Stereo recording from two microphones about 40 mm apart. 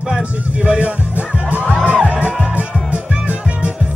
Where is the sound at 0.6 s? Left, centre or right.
Right.